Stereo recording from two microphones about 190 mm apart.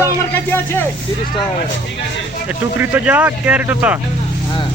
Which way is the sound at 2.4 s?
10° right (ahead or behind).